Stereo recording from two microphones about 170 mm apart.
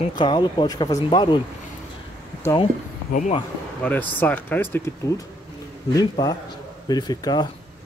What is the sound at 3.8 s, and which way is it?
Speech, 10° left (ahead or behind).